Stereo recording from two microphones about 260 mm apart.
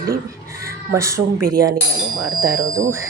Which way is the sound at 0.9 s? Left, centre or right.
Centre.